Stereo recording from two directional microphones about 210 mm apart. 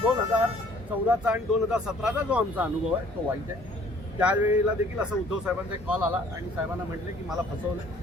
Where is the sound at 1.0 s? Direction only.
5° right (ahead or behind).